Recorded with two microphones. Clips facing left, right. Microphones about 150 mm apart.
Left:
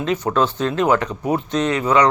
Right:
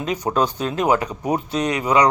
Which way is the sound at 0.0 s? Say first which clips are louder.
Left 2 dB; 15° right (ahead or behind).